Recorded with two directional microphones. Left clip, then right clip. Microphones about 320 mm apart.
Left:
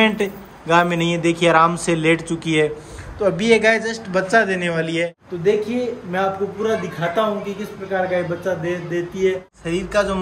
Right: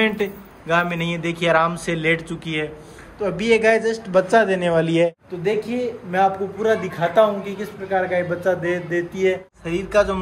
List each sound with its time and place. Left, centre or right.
0.0 s a man's voice: centre
4.8 s speech: centre
5.4 s a man's voice: centre